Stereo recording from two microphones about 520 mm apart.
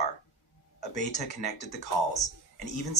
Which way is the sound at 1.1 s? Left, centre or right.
Left.